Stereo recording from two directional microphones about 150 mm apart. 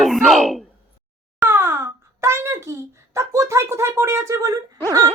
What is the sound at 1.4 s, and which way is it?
A child's voice, 15° right (ahead or behind).